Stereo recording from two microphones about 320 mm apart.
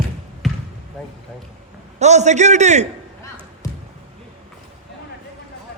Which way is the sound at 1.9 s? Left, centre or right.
Right.